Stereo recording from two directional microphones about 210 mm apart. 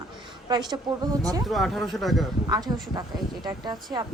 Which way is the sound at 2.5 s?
20° right (ahead or behind).